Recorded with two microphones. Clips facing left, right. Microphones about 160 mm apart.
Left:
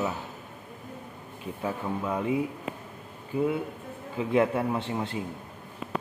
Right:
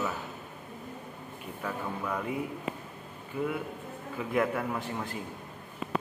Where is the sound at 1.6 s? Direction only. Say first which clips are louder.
Left 4 dB; 20° left (ahead or behind).